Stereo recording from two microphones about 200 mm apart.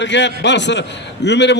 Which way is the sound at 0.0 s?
60° left (ahead or behind).